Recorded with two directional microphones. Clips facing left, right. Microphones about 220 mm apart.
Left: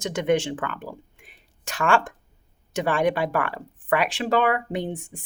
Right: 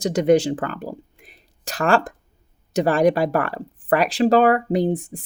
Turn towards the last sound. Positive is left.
turn(degrees=-35)  # may be behind; listen again after turning